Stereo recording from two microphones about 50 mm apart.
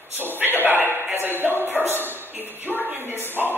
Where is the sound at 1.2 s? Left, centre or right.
Right.